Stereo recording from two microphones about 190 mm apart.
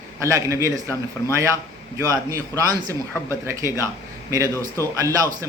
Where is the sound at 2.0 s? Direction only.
20° right (ahead or behind).